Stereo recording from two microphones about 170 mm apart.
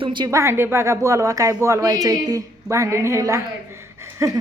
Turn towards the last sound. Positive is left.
turn(degrees=-15)  # may be behind; listen again after turning